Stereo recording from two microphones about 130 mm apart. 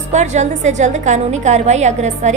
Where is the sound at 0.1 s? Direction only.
65° right (ahead or behind).